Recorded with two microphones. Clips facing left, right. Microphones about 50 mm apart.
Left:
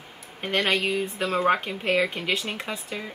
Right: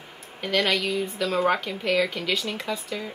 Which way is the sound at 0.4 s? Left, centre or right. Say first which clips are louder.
Even; left.